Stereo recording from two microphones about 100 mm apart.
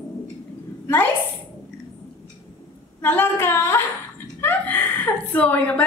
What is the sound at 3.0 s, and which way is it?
Female singing, 20° left (ahead or behind).